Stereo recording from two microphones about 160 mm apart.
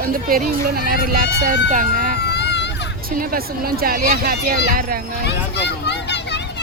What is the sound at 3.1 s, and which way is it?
Speech, 60° right (ahead or behind).